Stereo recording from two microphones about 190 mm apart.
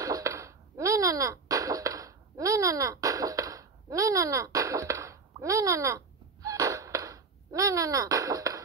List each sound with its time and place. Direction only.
0.0 s cough: 15° right (ahead or behind)